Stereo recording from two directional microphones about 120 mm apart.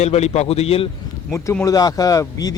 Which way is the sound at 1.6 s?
30° left (ahead or behind).